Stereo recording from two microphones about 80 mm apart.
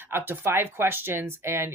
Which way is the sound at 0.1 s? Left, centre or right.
Right.